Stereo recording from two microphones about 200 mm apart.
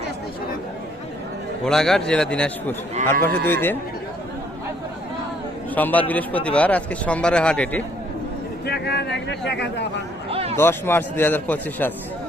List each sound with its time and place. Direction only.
1.6 s a man's voice: centre (ahead or behind)
5.7 s a man's voice: 10° left (ahead or behind)
8.6 s speech: 55° left (ahead or behind)
10.2 s a sound: 30° right (ahead or behind)
10.6 s a man's voice: 10° left (ahead or behind)